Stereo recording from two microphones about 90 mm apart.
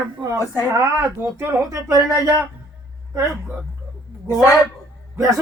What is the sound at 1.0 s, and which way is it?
Speech, 25° right (ahead or behind).